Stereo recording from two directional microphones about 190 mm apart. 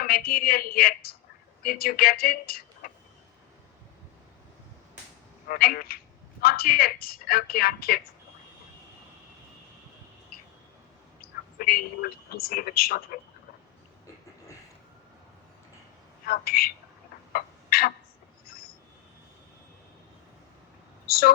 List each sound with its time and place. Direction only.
0.0 s speech: 50° left (ahead or behind)
5.5 s speech: 50° left (ahead or behind)
11.2 s a man's voice: 50° left (ahead or behind)
16.2 s speech: 50° left (ahead or behind)
17.3 s a sound: 50° left (ahead or behind)
21.1 s speech: 55° left (ahead or behind)